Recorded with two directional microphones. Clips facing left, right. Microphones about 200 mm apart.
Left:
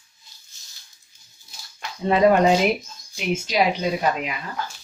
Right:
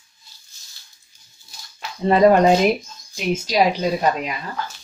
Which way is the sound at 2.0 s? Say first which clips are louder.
Right 3 dB; 40° right (ahead or behind).